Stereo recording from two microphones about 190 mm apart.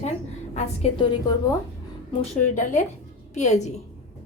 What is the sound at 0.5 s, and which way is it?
Speech, 35° left (ahead or behind).